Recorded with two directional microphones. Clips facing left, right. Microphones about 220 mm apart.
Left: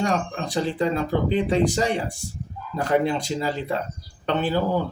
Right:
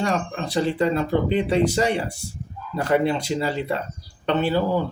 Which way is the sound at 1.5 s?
40° left (ahead or behind).